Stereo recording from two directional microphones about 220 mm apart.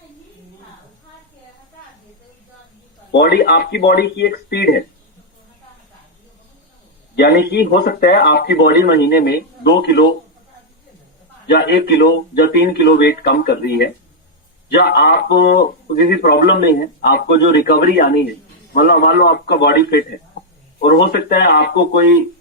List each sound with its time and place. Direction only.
3.1 s speech: 45° left (ahead or behind)
7.2 s speech: 50° left (ahead or behind)
11.4 s speech: 50° left (ahead or behind)